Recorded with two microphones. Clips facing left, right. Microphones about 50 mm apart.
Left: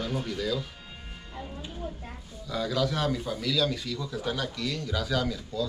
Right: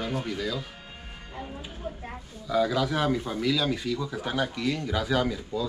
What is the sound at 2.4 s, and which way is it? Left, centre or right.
A man's voice, centre.